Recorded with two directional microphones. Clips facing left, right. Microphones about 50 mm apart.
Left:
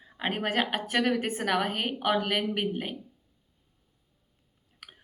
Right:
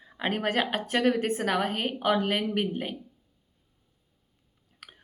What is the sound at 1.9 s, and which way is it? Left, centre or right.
Speech, centre.